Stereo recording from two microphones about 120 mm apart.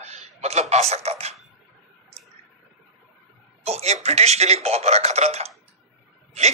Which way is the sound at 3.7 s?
60° right (ahead or behind).